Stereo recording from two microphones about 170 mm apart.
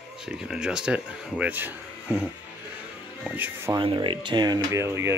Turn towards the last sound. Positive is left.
turn(degrees=-15)  # may be behind; listen again after turning